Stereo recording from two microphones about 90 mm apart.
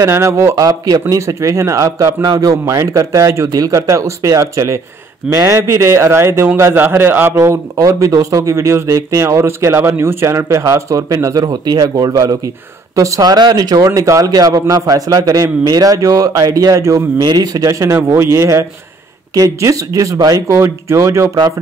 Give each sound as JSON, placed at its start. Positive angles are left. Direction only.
{"t": 0.0, "sound": "a man's voice", "side_deg": -30}
{"t": 17.2, "sound": "a man's voice", "side_deg": -45}
{"t": 20.5, "sound": "a man's voice", "side_deg": -30}